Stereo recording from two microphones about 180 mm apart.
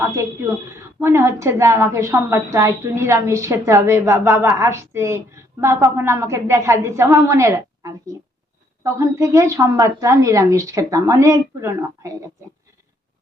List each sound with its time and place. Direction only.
0.0 s a woman's voice: 15° right (ahead or behind)